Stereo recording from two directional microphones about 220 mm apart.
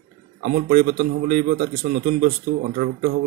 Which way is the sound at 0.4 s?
35° right (ahead or behind).